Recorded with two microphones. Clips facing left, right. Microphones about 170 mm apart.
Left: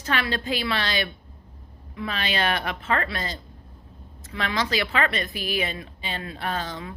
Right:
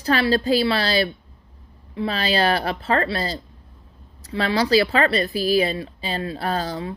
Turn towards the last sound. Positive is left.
turn(degrees=-35)  # may be behind; listen again after turning